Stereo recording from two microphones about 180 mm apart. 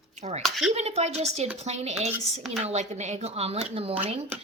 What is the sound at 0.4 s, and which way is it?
Speech, centre (ahead or behind).